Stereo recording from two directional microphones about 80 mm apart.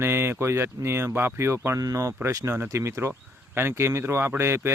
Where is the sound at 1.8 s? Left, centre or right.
Right.